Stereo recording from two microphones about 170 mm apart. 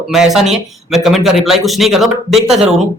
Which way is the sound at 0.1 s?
Centre (ahead or behind).